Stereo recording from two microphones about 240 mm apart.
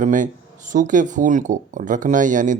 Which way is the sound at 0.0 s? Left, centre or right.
Right.